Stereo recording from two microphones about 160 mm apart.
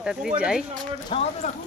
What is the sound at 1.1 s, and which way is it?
Speech, 40° left (ahead or behind).